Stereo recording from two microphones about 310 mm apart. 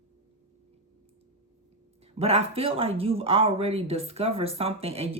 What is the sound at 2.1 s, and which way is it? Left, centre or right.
Speech, centre.